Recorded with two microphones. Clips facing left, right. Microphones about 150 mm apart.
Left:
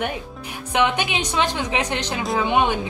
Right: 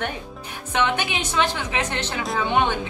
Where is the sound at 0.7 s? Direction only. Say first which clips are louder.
Left 2 dB; 15° left (ahead or behind).